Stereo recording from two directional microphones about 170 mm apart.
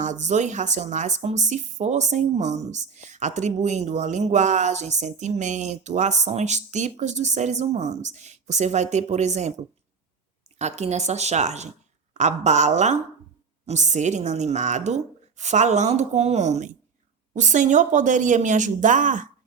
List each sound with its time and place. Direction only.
0.0 s speech: 45° right (ahead or behind)
10.6 s speech: 40° right (ahead or behind)